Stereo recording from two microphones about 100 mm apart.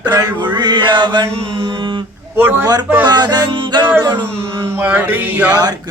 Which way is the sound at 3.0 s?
45° right (ahead or behind).